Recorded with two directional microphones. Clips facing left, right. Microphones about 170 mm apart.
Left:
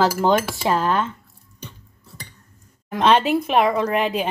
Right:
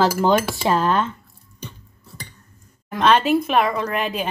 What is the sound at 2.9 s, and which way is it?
Speech, 20° left (ahead or behind).